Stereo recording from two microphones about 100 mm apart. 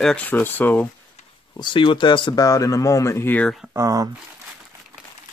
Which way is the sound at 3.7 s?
35° right (ahead or behind).